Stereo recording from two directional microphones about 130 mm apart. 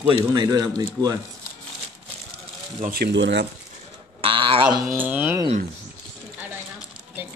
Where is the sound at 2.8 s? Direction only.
75° right (ahead or behind).